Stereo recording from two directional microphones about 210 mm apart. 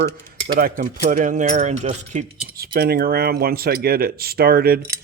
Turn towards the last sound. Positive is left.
turn(degrees=-45)  # may be behind; listen again after turning